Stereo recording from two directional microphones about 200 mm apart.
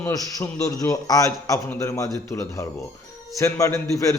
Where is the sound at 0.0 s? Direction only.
15° left (ahead or behind).